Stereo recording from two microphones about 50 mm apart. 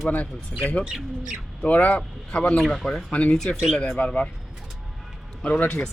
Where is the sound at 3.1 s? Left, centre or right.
Left.